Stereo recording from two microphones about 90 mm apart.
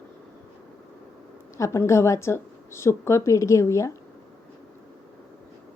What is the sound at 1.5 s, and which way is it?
Speech, 35° left (ahead or behind).